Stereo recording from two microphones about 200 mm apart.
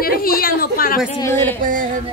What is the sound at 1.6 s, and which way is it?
Music, 45° right (ahead or behind).